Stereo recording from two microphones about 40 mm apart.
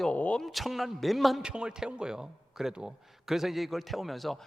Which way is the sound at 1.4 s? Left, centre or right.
Right.